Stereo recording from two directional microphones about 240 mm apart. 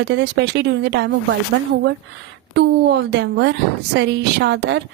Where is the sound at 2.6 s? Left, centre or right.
Right.